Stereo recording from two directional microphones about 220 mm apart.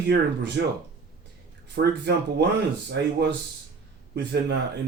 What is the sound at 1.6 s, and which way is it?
Speech, 50° right (ahead or behind).